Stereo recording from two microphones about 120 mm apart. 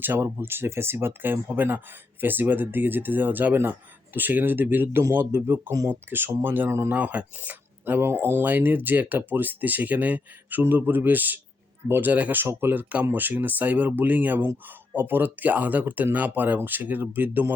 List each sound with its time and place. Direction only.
0.0 s speech: 20° right (ahead or behind)